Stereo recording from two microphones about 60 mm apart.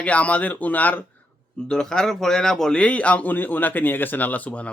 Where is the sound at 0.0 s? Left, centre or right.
Left.